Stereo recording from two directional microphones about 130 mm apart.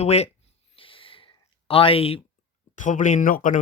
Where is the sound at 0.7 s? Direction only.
45° left (ahead or behind).